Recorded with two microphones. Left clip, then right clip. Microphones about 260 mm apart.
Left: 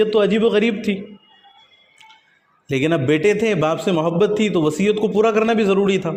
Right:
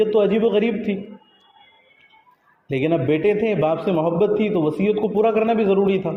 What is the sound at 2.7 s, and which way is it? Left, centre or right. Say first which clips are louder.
A man's voice: left 2 dB; left.